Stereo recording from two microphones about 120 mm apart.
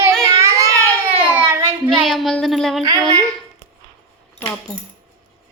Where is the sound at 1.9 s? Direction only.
Centre (ahead or behind).